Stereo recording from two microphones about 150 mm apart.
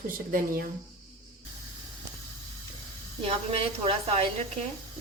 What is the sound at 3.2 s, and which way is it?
A woman's voice, 40° right (ahead or behind).